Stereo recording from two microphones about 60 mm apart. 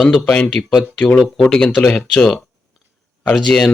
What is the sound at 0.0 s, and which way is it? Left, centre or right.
Speech, centre.